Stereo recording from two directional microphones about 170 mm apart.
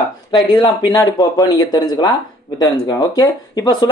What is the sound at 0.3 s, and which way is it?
Speech, 25° left (ahead or behind).